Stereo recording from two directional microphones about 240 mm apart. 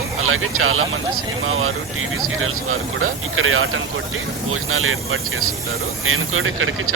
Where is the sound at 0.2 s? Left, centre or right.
Right.